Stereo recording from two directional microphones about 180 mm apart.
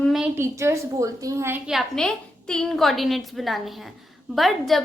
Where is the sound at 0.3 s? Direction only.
15° right (ahead or behind).